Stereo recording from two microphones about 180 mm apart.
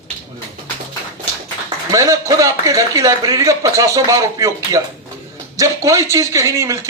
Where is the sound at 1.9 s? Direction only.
15° right (ahead or behind).